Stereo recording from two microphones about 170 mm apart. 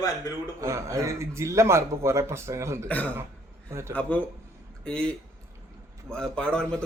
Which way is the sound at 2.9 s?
10° left (ahead or behind).